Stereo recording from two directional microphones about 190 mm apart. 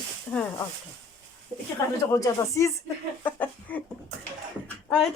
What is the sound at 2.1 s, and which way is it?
Speech, 20° left (ahead or behind).